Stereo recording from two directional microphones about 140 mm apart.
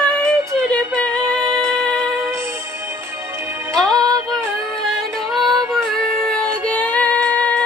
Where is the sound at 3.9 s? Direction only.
25° right (ahead or behind).